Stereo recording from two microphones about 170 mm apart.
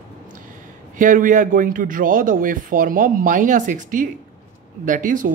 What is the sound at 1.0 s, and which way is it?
Speech, 50° right (ahead or behind).